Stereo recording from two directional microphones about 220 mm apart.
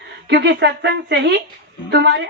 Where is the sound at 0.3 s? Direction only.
50° right (ahead or behind).